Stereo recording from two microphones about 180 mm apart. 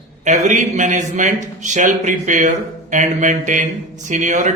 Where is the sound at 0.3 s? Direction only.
40° right (ahead or behind).